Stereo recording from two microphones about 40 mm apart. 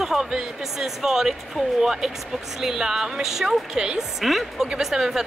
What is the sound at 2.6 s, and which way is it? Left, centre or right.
A woman's voice, centre.